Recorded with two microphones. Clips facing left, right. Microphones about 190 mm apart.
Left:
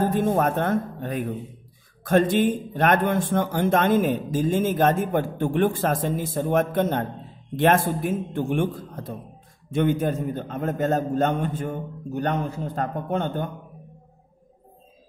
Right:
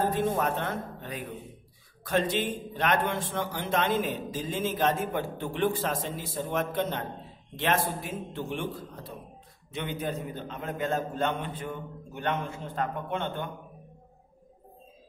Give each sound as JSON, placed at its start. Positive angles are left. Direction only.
{"t": 0.1, "sound": "a man's voice", "side_deg": 45}